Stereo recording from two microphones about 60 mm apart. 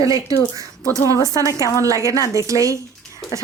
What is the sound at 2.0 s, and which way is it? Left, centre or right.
Speech, right.